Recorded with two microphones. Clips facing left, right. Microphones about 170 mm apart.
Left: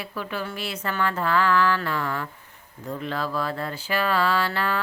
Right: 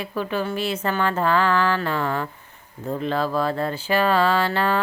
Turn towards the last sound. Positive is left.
turn(degrees=-25)  # may be behind; listen again after turning